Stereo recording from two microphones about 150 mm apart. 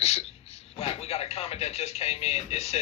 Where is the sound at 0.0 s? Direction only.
45° left (ahead or behind).